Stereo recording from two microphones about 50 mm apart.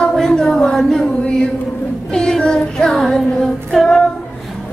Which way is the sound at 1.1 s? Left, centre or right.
Centre.